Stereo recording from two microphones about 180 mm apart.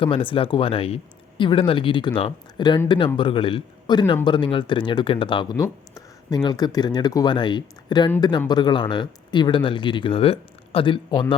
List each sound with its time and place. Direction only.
0.0 s a man's voice: 30° left (ahead or behind)